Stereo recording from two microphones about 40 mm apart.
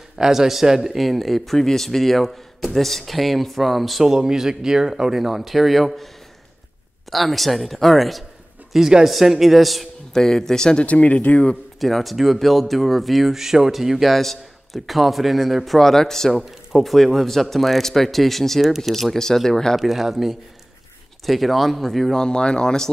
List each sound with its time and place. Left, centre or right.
0.2 s speech: centre
0.9 s speech: centre
4.0 s speech: centre
7.1 s speech: centre
10.1 s speech: centre
10.9 s speech: left
11.8 s speech: centre
14.1 s speech: centre
16.3 s speech: centre
19.8 s speech: centre
22.1 s speech: left